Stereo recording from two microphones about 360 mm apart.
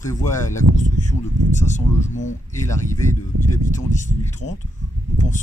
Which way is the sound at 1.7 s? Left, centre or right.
Centre.